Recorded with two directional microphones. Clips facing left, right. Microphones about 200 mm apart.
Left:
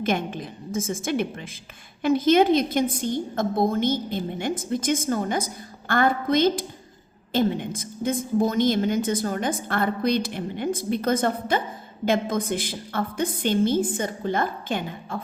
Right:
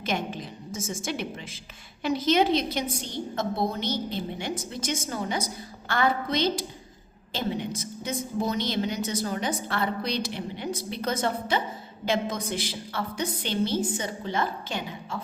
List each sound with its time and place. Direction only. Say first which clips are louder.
0.0 s a woman's voice: left 5 dB; 55° left (ahead or behind)